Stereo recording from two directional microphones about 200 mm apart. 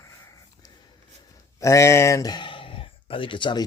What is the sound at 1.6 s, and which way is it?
Speech, 15° left (ahead or behind).